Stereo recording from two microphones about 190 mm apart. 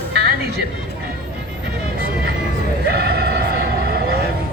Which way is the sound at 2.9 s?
55° right (ahead or behind).